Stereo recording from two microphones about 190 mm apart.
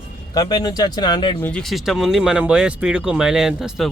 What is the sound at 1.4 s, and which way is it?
Speech, 5° left (ahead or behind).